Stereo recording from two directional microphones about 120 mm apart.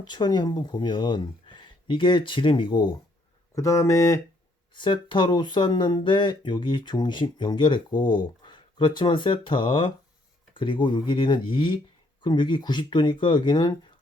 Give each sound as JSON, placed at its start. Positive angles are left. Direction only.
{"t": 0.0, "sound": "speech", "side_deg": 35}
{"t": 3.5, "sound": "speech", "side_deg": 25}
{"t": 4.7, "sound": "speech", "side_deg": 40}